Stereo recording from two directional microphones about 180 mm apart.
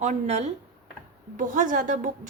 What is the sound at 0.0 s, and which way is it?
A woman's voice, 40° right (ahead or behind).